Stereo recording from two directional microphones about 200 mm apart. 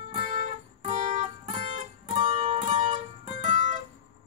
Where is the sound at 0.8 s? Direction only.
30° right (ahead or behind).